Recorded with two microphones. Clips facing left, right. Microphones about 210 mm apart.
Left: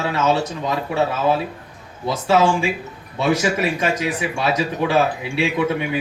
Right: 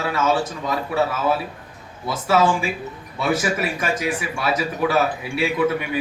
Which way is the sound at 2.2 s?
25° left (ahead or behind).